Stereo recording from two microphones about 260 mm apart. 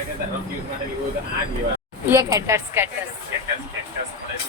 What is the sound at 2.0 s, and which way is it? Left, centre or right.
Speech, centre.